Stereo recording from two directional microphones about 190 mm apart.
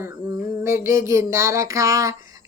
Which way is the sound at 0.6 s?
15° right (ahead or behind).